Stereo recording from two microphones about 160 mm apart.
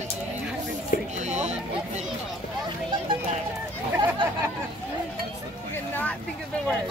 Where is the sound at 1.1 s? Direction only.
45° right (ahead or behind).